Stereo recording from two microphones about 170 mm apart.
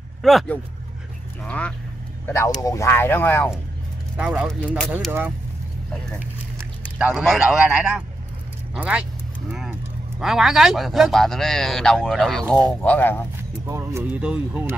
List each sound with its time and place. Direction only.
0.2 s speech: centre (ahead or behind)
2.2 s speech: 15° left (ahead or behind)
4.2 s speech: centre (ahead or behind)
7.0 s speech: 5° right (ahead or behind)
10.2 s speech: centre (ahead or behind)
13.7 s speech: 15° right (ahead or behind)